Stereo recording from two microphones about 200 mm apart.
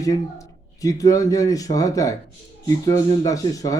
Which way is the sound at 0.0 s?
15° left (ahead or behind).